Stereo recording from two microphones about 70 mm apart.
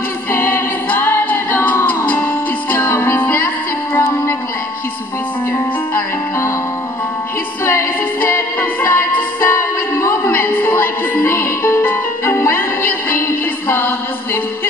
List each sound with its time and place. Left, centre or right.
0.3 s a capella: left
2.0 s music: left
2.8 s music: left
3.2 s music: left
5.9 s music: left
7.6 s music: left